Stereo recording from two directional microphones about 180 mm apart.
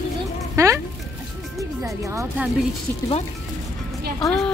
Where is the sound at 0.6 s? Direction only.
15° right (ahead or behind).